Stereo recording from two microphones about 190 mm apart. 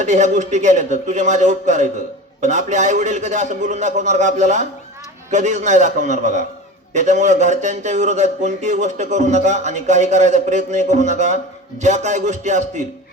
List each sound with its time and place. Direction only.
0.0 s speech: 40° right (ahead or behind)